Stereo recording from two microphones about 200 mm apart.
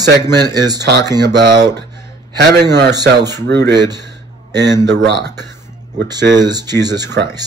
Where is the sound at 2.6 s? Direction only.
55° right (ahead or behind).